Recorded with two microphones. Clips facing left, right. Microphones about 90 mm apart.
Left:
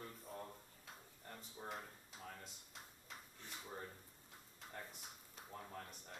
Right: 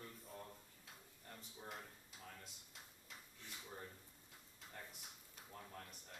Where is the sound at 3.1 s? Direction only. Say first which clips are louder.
Left 3 dB; 35° left (ahead or behind).